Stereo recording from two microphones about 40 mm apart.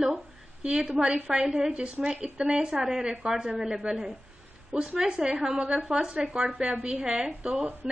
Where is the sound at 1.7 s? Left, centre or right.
Right.